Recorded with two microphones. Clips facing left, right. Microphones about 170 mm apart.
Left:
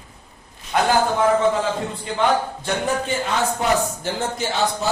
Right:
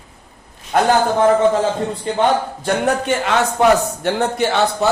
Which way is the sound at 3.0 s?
75° right (ahead or behind).